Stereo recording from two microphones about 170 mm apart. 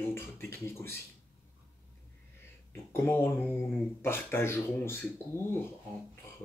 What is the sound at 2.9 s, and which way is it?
Speech, 10° left (ahead or behind).